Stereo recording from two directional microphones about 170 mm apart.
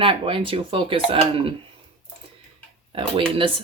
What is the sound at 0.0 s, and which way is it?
A woman's voice, 30° right (ahead or behind).